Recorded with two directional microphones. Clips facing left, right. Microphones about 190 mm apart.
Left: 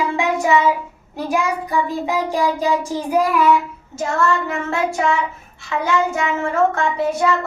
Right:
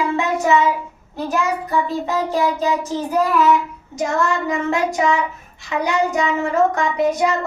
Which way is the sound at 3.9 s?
15° right (ahead or behind).